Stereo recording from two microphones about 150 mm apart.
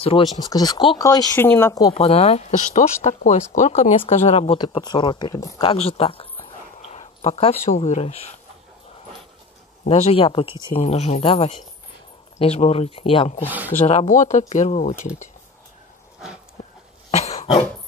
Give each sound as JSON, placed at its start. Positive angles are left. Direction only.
{"t": 0.0, "sound": "speech", "side_deg": 35}
{"t": 0.5, "sound": "speech", "side_deg": 25}
{"t": 2.0, "sound": "speech", "side_deg": 40}
{"t": 4.6, "sound": "speech", "side_deg": 30}
{"t": 5.6, "sound": "a sound", "side_deg": 40}
{"t": 7.7, "sound": "speech", "side_deg": 45}
{"t": 9.8, "sound": "speech", "side_deg": 40}
{"t": 13.8, "sound": "speech", "side_deg": 50}
{"t": 17.1, "sound": "cough", "side_deg": 50}